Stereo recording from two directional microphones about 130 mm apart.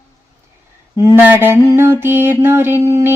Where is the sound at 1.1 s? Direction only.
15° right (ahead or behind).